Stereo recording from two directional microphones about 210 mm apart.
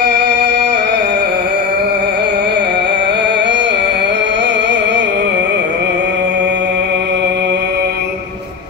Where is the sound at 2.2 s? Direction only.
55° right (ahead or behind).